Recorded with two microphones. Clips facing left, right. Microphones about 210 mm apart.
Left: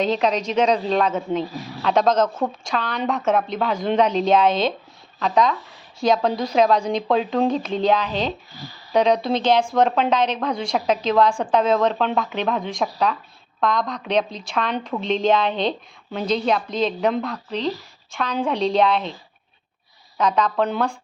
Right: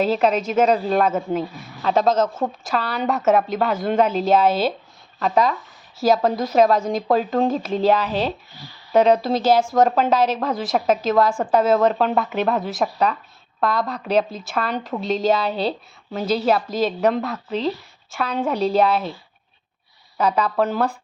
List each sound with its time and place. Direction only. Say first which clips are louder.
0.0 s a woman's voice: right 2 dB; 5° right (ahead or behind)
15.0 s speech: even; 40° right (ahead or behind)
16.1 s a woman's voice: right 2 dB; 5° right (ahead or behind)
20.1 s a woman's voice: even; 5° right (ahead or behind)